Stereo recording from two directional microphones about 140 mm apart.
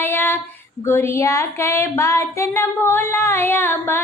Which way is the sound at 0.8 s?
20° left (ahead or behind).